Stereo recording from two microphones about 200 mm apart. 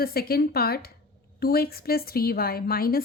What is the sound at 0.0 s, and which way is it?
A woman's voice, 50° left (ahead or behind).